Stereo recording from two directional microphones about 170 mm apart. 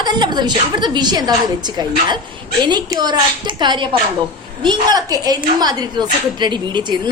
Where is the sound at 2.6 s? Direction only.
25° right (ahead or behind).